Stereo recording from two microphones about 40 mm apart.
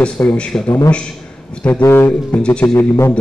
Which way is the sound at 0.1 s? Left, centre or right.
Centre.